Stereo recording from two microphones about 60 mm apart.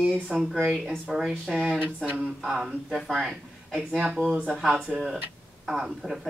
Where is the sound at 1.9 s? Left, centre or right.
Centre.